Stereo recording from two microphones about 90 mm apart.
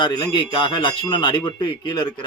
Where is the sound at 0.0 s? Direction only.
55° left (ahead or behind).